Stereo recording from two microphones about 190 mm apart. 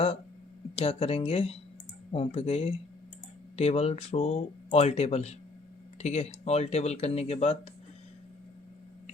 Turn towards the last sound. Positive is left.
turn(degrees=35)  # may be behind; listen again after turning